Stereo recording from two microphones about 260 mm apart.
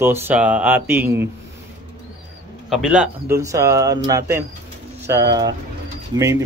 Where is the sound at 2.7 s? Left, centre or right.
Centre.